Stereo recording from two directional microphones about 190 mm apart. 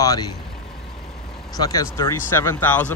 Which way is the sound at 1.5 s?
20° left (ahead or behind).